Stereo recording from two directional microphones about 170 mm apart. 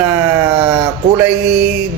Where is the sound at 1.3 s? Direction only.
90° right.